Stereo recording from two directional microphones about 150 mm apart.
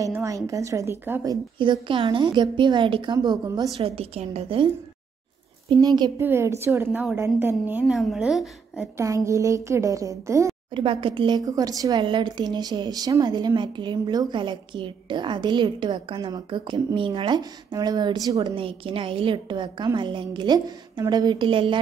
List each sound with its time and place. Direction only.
0.0 s speech: 20° right (ahead or behind)
3.8 s a woman's voice: 40° right (ahead or behind)
5.8 s speech: 25° right (ahead or behind)
6.1 s a woman's voice: 15° right (ahead or behind)
7.8 s a woman's voice: centre (ahead or behind)
8.9 s speech: 20° right (ahead or behind)
10.7 s speech: 35° right (ahead or behind)
18.5 s a woman's voice: 35° right (ahead or behind)